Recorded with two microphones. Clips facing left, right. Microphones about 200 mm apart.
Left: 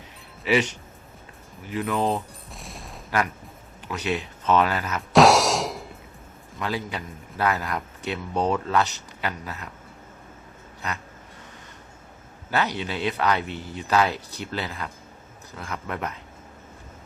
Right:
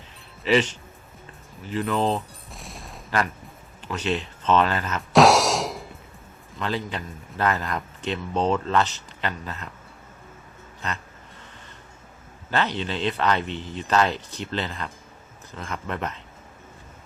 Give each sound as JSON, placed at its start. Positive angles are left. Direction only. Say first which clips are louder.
{"t": 0.4, "sound": "a man's voice", "louder": "right 2 dB", "side_deg": 10}
{"t": 1.8, "sound": "a sound", "louder": "right 1 dB", "side_deg": 0}
{"t": 3.8, "sound": "music", "louder": "right 1 dB", "side_deg": 10}
{"t": 6.6, "sound": "a man's voice", "louder": "right 1 dB", "side_deg": 10}
{"t": 12.5, "sound": "a man's voice", "louder": "right 1 dB", "side_deg": 10}